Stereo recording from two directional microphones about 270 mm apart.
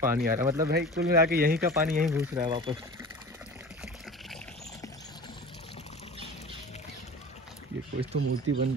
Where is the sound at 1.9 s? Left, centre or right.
Centre.